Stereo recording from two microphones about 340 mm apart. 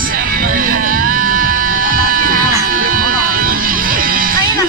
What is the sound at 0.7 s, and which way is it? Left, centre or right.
Music, right.